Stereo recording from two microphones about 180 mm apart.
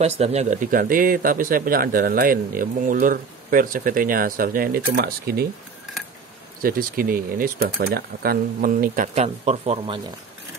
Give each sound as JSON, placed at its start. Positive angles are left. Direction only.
{"t": 0.0, "sound": "speech", "side_deg": -35}
{"t": 6.6, "sound": "speech", "side_deg": -50}